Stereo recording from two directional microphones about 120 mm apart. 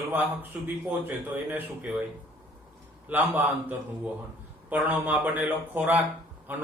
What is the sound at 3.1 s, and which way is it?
Speech, 15° right (ahead or behind).